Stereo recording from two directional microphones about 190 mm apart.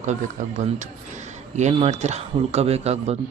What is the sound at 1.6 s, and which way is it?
Speech, 35° right (ahead or behind).